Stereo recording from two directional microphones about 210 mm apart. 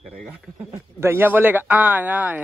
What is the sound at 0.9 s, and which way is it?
Speech, 10° right (ahead or behind).